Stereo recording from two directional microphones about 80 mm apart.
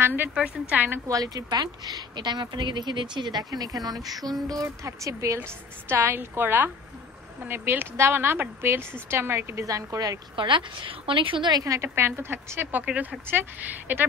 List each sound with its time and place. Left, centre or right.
0.0 s a woman's voice: right
1.0 s speech: right
9.7 s speech: right
10.3 s a woman's voice: right
11.6 s a woman's voice: right
12.8 s speech: centre